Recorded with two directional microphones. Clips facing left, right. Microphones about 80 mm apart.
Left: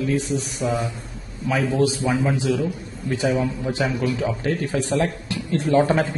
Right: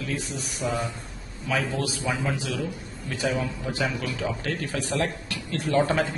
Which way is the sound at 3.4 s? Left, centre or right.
Left.